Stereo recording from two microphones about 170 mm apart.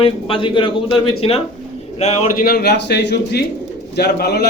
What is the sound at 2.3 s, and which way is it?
A man's voice, 60° left (ahead or behind).